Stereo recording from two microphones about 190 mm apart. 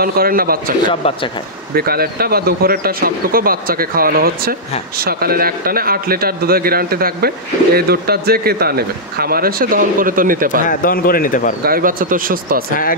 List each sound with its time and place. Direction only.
0.0 s speech: 50° right (ahead or behind)
0.8 s speech: 25° left (ahead or behind)
1.8 s speech: 55° right (ahead or behind)
10.7 s a man's voice: 45° left (ahead or behind)
11.6 s speech: 50° right (ahead or behind)